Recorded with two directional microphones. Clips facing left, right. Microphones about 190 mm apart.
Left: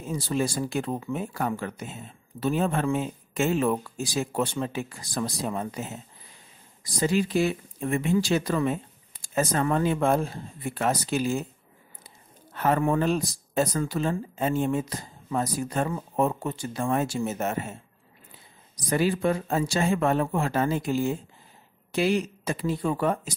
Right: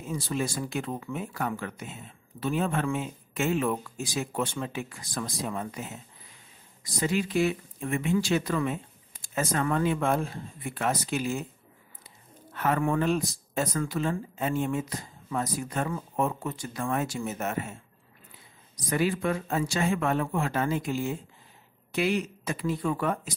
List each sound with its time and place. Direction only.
0.1 s speech: 35° left (ahead or behind)
12.5 s speech: 30° left (ahead or behind)
18.9 s speech: 35° left (ahead or behind)